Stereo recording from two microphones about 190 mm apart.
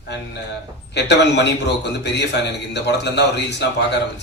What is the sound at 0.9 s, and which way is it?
A man's voice, 65° left (ahead or behind).